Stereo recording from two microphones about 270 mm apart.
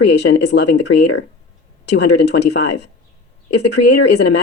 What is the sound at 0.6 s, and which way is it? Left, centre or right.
Speech, left.